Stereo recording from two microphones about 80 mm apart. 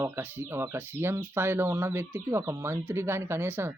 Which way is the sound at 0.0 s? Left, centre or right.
Right.